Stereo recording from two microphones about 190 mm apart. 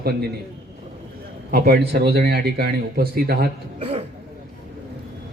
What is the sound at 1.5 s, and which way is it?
A man's voice, 50° right (ahead or behind).